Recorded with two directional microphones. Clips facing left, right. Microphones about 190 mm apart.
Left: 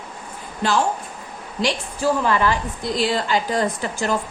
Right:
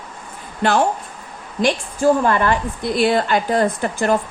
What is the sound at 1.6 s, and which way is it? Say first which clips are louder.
A woman's voice: right 5 dB; 50° right (ahead or behind).